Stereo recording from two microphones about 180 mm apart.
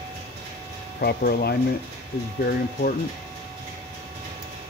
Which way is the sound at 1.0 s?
60° left (ahead or behind).